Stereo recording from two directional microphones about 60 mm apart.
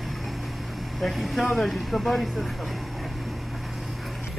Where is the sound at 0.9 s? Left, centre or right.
Centre.